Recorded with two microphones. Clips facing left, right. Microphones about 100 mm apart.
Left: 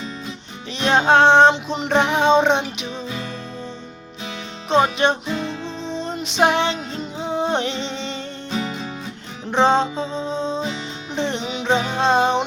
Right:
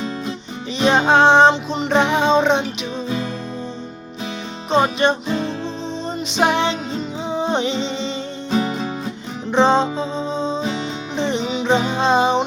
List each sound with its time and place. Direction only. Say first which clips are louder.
0.8 s music: right 1 dB; 5° right (ahead or behind)
1.5 s music: right 1 dB; 5° left (ahead or behind)
4.7 s music: right 1 dB; centre (ahead or behind)
5.3 s music: right 3 dB; 45° right (ahead or behind)
6.3 s music: even; 5° right (ahead or behind)
7.8 s music: right 4 dB; 60° left (ahead or behind)
8.5 s music: right 6 dB; 40° right (ahead or behind)
9.5 s music: right 2 dB; 5° left (ahead or behind)